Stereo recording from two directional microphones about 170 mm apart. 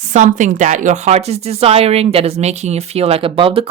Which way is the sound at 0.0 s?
45° right (ahead or behind).